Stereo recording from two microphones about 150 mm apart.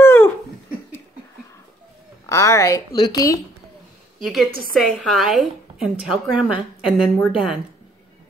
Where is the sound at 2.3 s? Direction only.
20° left (ahead or behind).